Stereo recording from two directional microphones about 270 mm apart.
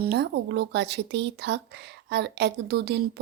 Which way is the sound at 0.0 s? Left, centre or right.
Right.